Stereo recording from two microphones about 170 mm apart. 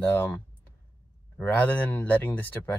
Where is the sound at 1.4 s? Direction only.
10° left (ahead or behind).